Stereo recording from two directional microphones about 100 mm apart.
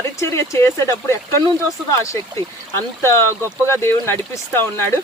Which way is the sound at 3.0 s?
25° left (ahead or behind).